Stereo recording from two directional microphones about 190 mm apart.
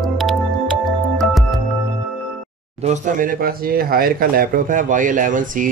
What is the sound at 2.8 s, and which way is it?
Speech, 40° right (ahead or behind).